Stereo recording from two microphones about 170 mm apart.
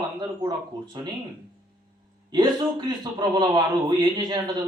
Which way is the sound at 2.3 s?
25° right (ahead or behind).